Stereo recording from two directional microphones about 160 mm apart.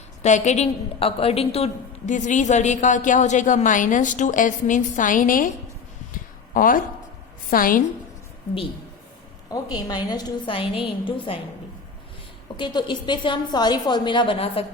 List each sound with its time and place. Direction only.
0.2 s a woman's voice: 45° left (ahead or behind)
6.5 s a woman's voice: 60° left (ahead or behind)
9.5 s a woman's voice: 25° left (ahead or behind)
12.5 s a woman's voice: 30° left (ahead or behind)